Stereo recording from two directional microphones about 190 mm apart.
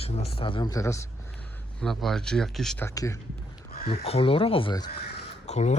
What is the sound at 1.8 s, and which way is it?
Speech, centre (ahead or behind).